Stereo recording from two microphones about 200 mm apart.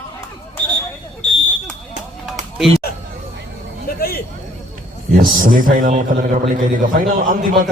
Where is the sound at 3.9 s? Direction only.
50° left (ahead or behind).